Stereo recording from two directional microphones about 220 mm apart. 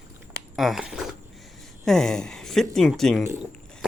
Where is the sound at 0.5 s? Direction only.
Centre (ahead or behind).